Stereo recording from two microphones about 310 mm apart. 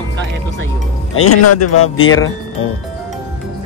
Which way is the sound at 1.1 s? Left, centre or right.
Left.